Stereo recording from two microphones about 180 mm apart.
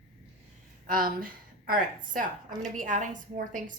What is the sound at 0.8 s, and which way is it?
A woman's voice, 50° right (ahead or behind).